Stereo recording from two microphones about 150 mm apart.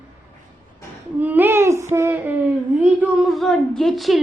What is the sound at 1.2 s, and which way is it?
Child singing, 10° right (ahead or behind).